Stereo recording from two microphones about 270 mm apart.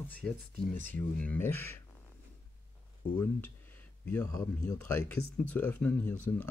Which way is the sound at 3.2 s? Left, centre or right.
Centre.